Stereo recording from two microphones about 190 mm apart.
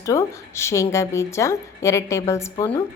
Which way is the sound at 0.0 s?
15° left (ahead or behind).